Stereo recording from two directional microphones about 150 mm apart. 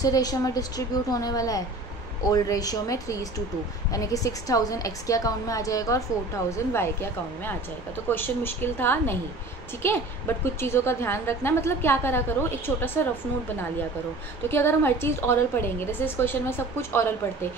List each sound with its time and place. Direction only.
0.0 s a woman's voice: 25° left (ahead or behind)
14.5 s a woman's voice: 15° left (ahead or behind)